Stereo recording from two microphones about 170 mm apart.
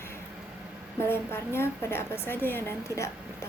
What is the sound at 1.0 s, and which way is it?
A woman's voice, 15° left (ahead or behind).